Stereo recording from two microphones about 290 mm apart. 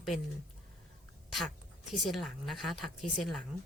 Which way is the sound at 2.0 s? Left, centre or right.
Centre.